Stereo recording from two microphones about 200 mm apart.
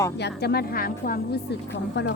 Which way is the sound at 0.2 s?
55° left (ahead or behind).